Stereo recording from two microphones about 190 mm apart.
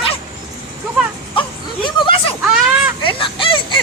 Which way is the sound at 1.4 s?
25° left (ahead or behind).